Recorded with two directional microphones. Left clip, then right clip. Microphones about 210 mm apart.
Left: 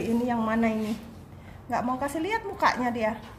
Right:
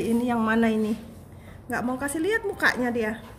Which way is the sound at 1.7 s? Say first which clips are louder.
Left 1 dB; 10° right (ahead or behind).